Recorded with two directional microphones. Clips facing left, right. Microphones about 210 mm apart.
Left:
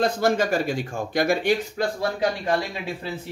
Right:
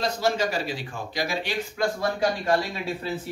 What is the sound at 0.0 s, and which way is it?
Speech, 50° left (ahead or behind).